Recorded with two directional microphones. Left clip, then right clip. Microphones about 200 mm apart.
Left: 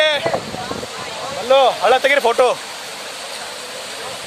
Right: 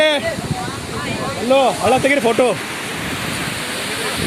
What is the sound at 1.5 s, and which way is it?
Speech, 25° left (ahead or behind).